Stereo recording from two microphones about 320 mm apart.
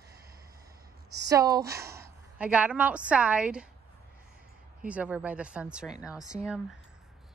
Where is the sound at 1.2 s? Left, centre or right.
Centre.